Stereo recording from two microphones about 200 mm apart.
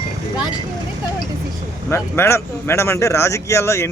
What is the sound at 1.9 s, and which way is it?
A man's voice, 10° left (ahead or behind).